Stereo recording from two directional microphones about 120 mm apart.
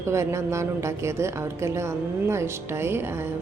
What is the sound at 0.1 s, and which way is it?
A woman's voice, 25° right (ahead or behind).